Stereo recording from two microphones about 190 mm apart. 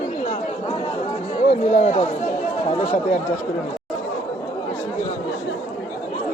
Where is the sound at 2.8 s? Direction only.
35° left (ahead or behind).